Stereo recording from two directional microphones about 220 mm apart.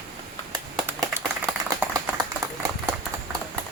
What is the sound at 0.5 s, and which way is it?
Clapping, 15° right (ahead or behind).